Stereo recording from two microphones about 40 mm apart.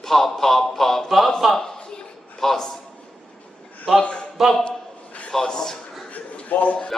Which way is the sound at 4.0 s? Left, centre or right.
Left.